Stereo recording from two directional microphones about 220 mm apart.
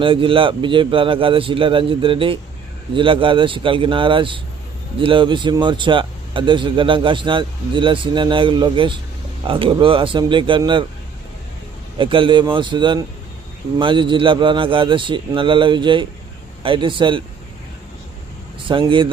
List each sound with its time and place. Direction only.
0.0 s speech: 25° right (ahead or behind)
11.9 s speech: 25° right (ahead or behind)
18.7 s speech: 20° right (ahead or behind)